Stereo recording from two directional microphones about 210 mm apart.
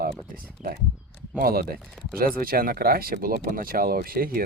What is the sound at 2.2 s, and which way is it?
Speech, 45° right (ahead or behind).